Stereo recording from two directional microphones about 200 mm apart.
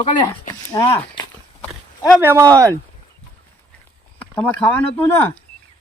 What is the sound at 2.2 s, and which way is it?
Speech, 10° right (ahead or behind).